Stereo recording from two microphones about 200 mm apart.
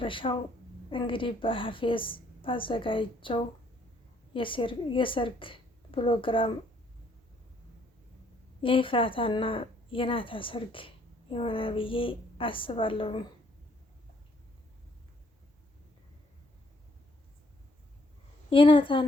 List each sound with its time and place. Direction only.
0.0 s speech: 25° left (ahead or behind)
8.6 s speech: 25° left (ahead or behind)
18.5 s speech: 25° left (ahead or behind)